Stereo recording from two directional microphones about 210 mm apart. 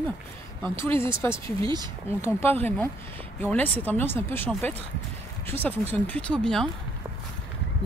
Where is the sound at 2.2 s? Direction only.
10° left (ahead or behind).